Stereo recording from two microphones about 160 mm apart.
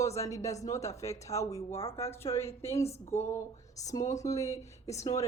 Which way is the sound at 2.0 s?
15° left (ahead or behind).